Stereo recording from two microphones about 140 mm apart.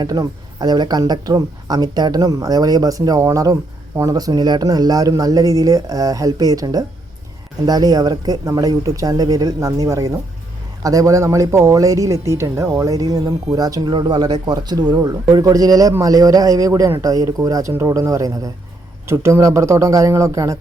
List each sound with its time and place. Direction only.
0.0 s speech: 30° right (ahead or behind)